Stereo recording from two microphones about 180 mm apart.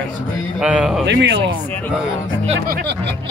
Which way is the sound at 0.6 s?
5° right (ahead or behind).